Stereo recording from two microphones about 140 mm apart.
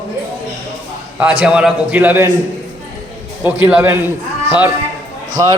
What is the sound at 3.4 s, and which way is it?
Speech, 15° right (ahead or behind).